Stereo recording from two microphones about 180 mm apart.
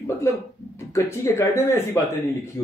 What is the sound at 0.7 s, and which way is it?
Speech, 15° left (ahead or behind).